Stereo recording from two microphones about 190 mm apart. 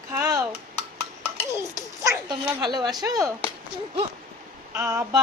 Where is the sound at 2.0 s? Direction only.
25° right (ahead or behind).